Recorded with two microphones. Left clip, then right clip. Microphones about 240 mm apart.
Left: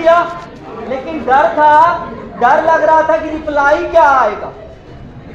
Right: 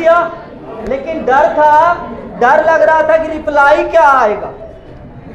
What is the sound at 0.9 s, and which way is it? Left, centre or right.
Speech, right.